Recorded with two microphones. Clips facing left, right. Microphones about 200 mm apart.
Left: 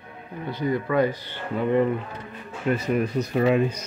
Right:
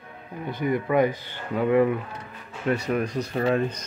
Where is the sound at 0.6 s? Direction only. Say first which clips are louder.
Right 1 dB; 20° right (ahead or behind).